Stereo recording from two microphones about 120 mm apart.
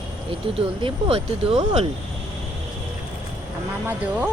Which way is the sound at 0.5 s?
50° right (ahead or behind).